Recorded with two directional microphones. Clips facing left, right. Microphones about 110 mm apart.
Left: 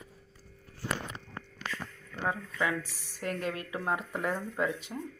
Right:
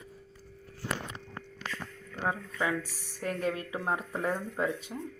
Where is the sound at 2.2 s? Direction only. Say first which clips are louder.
Even; 25° right (ahead or behind).